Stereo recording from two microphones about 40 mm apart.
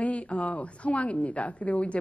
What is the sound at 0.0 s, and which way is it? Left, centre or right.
A woman's voice, left.